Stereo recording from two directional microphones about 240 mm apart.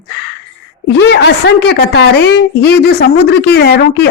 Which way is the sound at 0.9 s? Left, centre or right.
Left.